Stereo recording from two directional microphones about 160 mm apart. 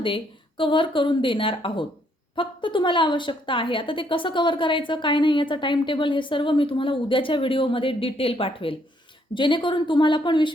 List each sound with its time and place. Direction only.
0.0 s a woman's voice: 30° left (ahead or behind)